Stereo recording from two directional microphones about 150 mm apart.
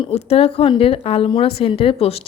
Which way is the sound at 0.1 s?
40° left (ahead or behind).